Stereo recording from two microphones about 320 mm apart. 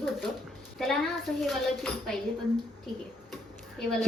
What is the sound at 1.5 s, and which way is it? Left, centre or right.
Speech, centre.